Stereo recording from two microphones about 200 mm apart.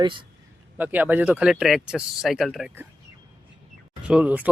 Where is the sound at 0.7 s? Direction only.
10° right (ahead or behind).